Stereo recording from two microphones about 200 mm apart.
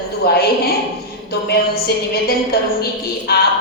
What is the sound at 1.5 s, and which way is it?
A woman's voice, 50° left (ahead or behind).